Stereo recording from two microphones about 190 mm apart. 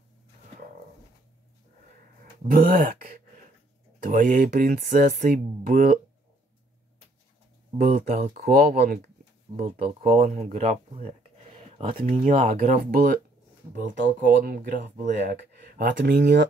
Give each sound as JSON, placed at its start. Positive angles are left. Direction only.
{"t": 2.5, "sound": "speech", "side_deg": -50}
{"t": 8.1, "sound": "speech", "side_deg": -45}
{"t": 9.5, "sound": "speech", "side_deg": -45}
{"t": 12.3, "sound": "speech", "side_deg": -45}
{"t": 15.3, "sound": "speech", "side_deg": -60}